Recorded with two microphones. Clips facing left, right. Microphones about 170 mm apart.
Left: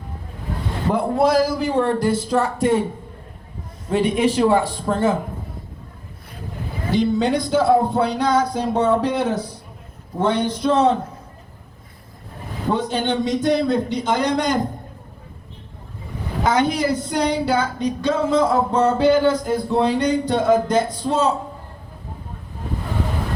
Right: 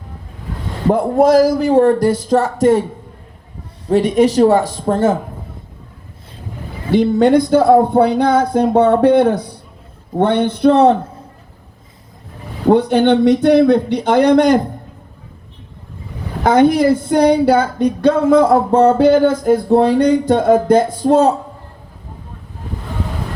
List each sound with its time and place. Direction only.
0.9 s a man's voice: 45° right (ahead or behind)
3.8 s a man's voice: 40° right (ahead or behind)
6.9 s speech: 55° right (ahead or behind)
12.6 s speech: 60° right (ahead or behind)
16.4 s speech: 55° right (ahead or behind)